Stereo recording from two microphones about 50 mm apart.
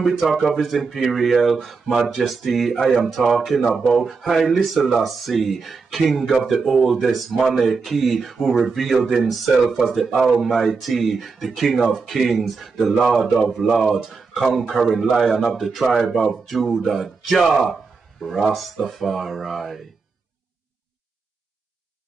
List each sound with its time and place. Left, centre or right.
0.0 s speech: centre
14.1 s speech: centre